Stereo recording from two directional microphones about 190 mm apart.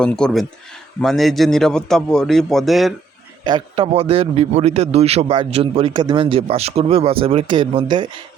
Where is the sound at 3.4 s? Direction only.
25° right (ahead or behind).